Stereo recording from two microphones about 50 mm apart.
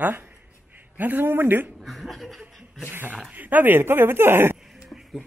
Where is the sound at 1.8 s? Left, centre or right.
Centre.